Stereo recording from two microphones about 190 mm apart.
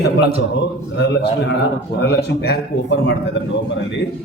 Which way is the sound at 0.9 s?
65° left (ahead or behind).